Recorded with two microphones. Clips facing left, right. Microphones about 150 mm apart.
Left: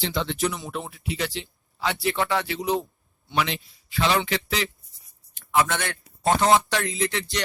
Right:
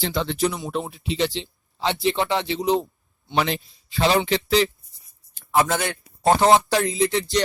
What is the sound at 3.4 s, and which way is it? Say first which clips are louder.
Speech: right 3 dB; 40° right (ahead or behind).